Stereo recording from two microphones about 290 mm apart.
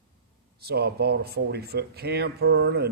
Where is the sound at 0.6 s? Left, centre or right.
Right.